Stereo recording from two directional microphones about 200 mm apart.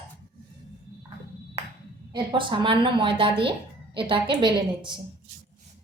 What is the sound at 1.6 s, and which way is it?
Ping, 15° right (ahead or behind).